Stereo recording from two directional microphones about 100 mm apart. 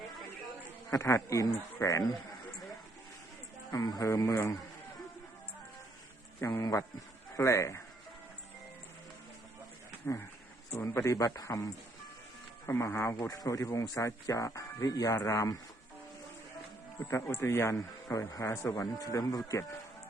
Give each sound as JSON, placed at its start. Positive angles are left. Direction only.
{"t": 0.9, "sound": "speech", "side_deg": 30}
{"t": 3.7, "sound": "speech", "side_deg": 35}
{"t": 6.4, "sound": "speech", "side_deg": 30}
{"t": 10.0, "sound": "a man's voice", "side_deg": 25}
{"t": 17.1, "sound": "speech", "side_deg": 25}